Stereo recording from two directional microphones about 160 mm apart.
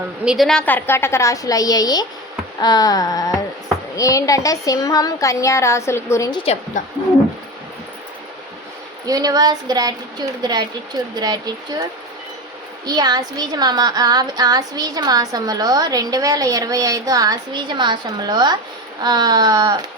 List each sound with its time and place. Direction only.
0.3 s a woman's voice: centre (ahead or behind); by 6.3 s 20° left (ahead or behind)
6.4 s a woman's voice: 40° left (ahead or behind)
9.0 s a woman's voice: 25° right (ahead or behind)